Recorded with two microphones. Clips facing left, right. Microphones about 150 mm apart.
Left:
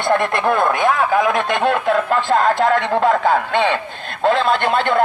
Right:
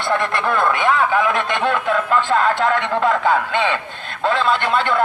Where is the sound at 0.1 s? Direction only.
45° left (ahead or behind).